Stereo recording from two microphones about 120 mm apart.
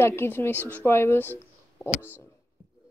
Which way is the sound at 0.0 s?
20° left (ahead or behind).